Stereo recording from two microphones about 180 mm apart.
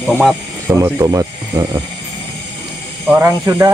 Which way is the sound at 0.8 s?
15° right (ahead or behind).